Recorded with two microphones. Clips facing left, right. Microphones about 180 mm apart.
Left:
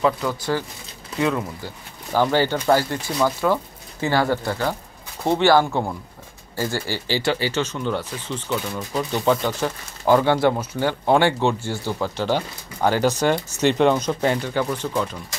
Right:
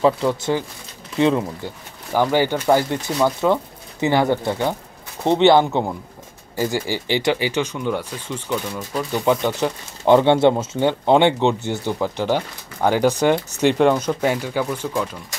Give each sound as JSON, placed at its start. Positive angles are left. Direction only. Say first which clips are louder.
{"t": 0.0, "sound": "speech", "louder": "right 4 dB", "side_deg": -25}
{"t": 2.3, "sound": "speech", "louder": "right 3 dB", "side_deg": -10}